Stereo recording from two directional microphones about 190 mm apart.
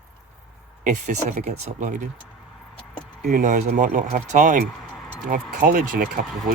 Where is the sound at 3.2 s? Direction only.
45° right (ahead or behind).